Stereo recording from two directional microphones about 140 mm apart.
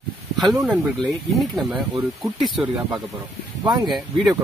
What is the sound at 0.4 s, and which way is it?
Speech, centre (ahead or behind).